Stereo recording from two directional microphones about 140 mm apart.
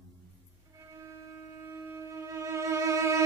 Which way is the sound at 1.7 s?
20° right (ahead or behind).